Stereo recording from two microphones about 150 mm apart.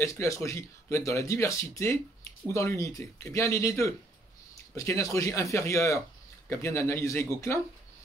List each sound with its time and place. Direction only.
0.0 s speech: 20° left (ahead or behind)